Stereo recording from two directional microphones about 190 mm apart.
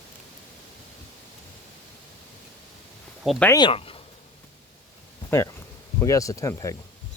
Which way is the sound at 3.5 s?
25° left (ahead or behind).